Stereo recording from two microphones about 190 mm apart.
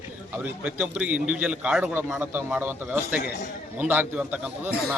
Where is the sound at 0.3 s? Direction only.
10° right (ahead or behind).